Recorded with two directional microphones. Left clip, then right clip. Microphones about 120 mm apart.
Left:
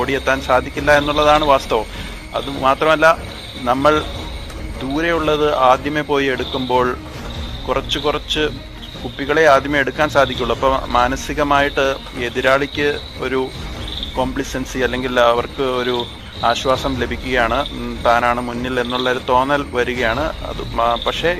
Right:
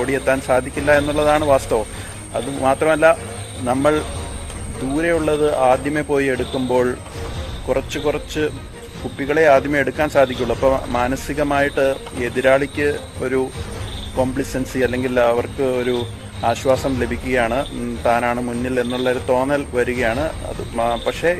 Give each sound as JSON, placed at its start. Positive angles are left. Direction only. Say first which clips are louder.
{"t": 0.0, "sound": "a man's voice", "louder": "left 1 dB", "side_deg": -40}
{"t": 10.5, "sound": "a man's voice", "louder": "left 2 dB", "side_deg": -25}